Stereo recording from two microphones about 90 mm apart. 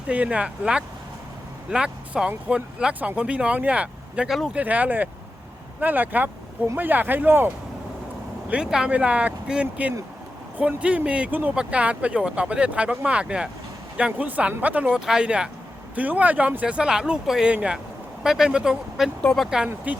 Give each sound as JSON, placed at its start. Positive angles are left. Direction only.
{"t": 0.1, "sound": "speech", "side_deg": -15}
{"t": 8.4, "sound": "speech", "side_deg": -10}
{"t": 19.2, "sound": "speech", "side_deg": 10}
{"t": 19.5, "sound": "speech", "side_deg": -10}